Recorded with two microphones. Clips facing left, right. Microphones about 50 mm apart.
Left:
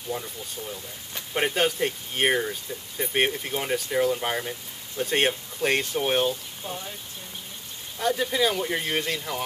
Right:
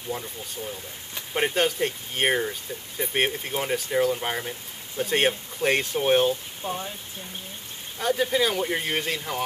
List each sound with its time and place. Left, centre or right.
1.3 s speech: centre
6.6 s speech: centre
8.0 s speech: centre